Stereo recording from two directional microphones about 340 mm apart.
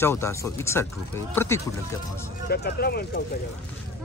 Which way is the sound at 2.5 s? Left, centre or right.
Left.